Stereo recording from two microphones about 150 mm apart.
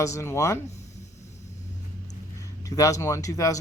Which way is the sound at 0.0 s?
20° left (ahead or behind).